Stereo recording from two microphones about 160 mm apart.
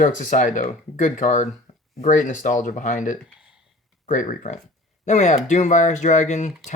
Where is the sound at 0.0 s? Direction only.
50° left (ahead or behind).